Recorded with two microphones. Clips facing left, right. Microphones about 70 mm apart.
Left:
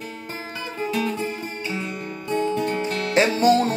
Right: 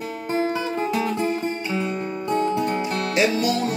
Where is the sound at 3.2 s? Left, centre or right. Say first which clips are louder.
Left 4 dB; left.